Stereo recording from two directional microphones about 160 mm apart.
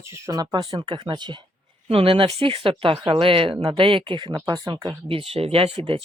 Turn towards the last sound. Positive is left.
turn(degrees=-35)  # may be behind; listen again after turning